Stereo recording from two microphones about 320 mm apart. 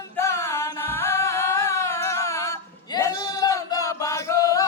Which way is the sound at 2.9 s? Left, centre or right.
Centre.